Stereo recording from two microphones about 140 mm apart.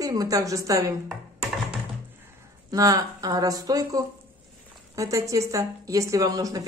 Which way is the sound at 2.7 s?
25° right (ahead or behind).